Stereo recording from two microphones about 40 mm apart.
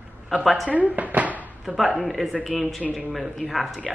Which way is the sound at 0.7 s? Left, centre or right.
Right.